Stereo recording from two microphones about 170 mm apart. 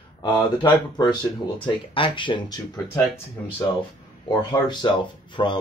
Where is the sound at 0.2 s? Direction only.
25° left (ahead or behind).